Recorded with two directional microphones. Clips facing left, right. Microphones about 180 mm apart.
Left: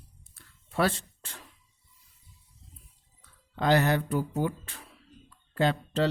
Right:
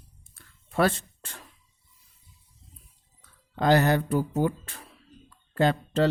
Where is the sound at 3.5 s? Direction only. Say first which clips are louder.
Right 3 dB; 40° right (ahead or behind).